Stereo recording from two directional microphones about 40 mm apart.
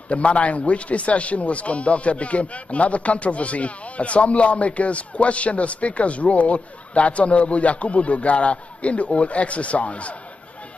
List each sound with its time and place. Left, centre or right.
0.1 s speech: left